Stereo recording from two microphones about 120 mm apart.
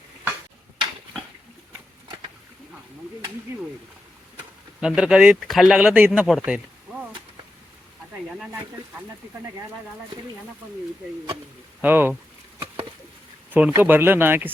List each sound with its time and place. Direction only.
4.8 s speech: 5° right (ahead or behind)
6.4 s a sound: 15° right (ahead or behind)
11.8 s speech: 15° right (ahead or behind)
13.5 s speech: 15° right (ahead or behind)